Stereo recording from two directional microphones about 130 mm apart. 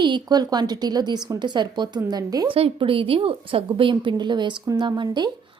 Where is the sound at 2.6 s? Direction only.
45° right (ahead or behind).